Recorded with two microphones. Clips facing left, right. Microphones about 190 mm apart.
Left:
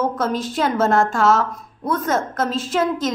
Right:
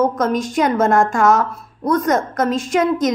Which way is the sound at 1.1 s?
15° right (ahead or behind).